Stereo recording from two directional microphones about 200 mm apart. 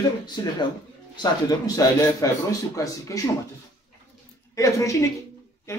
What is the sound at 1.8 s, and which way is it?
A man's voice, 15° left (ahead or behind).